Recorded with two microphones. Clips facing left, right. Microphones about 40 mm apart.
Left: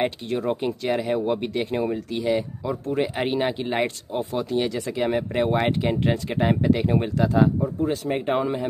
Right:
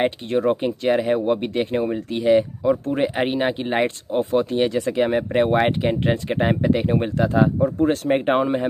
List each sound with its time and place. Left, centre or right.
0.3 s speech: right
3.0 s speech: centre
7.6 s speech: right